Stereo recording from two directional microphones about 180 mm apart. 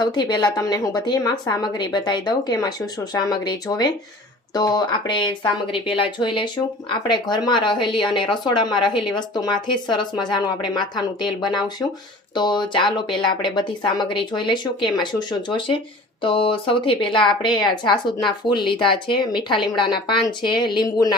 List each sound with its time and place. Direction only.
0.0 s a woman's voice: 25° left (ahead or behind)